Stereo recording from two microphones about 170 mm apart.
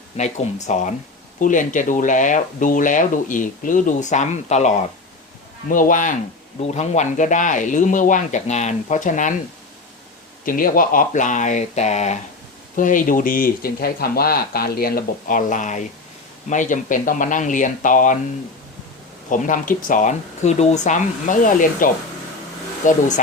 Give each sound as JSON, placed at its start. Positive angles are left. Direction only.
{"t": 0.2, "sound": "speech", "side_deg": 45}
{"t": 10.4, "sound": "speech", "side_deg": 55}
{"t": 19.3, "sound": "speech", "side_deg": 50}